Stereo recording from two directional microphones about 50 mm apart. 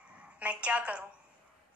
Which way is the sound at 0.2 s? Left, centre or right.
Right.